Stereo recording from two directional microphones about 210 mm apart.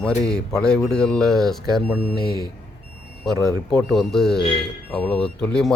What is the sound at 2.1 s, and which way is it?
Speech, 50° left (ahead or behind).